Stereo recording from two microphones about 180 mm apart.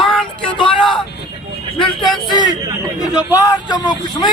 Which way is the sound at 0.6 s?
30° left (ahead or behind).